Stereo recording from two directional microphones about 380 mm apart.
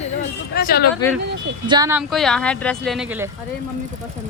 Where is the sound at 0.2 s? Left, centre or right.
Left.